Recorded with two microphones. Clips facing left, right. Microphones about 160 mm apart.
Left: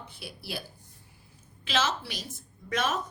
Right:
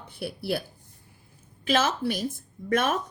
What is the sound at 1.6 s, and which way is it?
A woman's voice, 50° right (ahead or behind).